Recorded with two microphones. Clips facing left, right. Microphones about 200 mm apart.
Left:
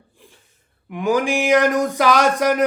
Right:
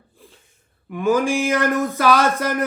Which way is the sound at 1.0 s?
15° left (ahead or behind).